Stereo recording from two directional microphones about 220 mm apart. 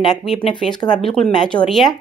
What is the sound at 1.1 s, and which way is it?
Speech, 5° left (ahead or behind).